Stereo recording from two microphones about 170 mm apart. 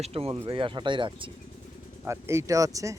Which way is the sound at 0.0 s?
35° right (ahead or behind).